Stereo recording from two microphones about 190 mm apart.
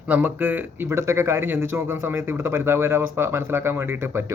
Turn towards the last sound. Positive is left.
turn(degrees=-10)  # may be behind; listen again after turning